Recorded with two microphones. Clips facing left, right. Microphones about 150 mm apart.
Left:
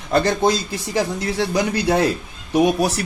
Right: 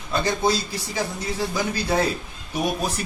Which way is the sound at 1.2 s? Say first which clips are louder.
Left 5 dB; 80° left.